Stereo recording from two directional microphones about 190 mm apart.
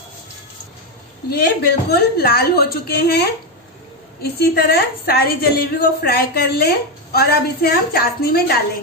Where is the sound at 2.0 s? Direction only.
55° left (ahead or behind).